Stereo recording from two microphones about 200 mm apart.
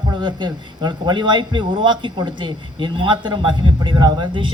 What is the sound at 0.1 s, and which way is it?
Speech, 25° right (ahead or behind).